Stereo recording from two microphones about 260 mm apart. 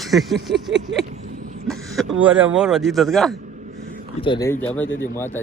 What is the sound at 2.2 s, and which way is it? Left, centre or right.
A man's voice, centre.